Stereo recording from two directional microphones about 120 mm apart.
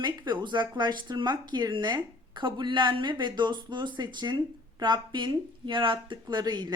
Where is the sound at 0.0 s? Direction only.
40° right (ahead or behind).